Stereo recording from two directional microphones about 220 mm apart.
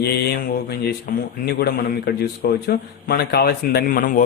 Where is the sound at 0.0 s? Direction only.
45° left (ahead or behind).